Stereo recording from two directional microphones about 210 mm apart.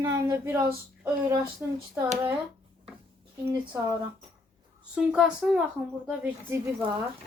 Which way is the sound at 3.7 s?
15° right (ahead or behind).